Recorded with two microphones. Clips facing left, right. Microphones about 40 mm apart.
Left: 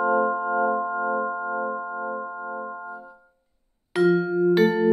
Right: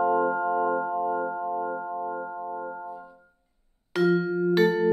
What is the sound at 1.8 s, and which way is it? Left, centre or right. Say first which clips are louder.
Music: left 2 dB; centre.